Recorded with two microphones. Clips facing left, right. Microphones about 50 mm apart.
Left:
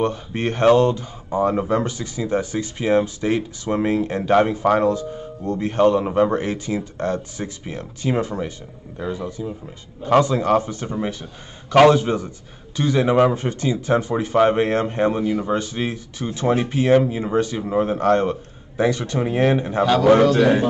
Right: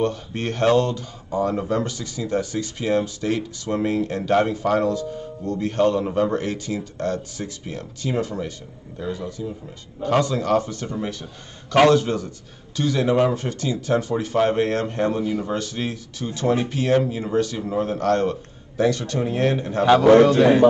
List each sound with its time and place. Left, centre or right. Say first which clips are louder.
0.0 s a man's voice: left 2 dB; left
20.2 s a man's voice: even; right